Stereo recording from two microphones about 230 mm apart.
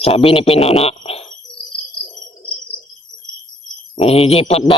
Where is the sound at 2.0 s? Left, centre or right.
Left.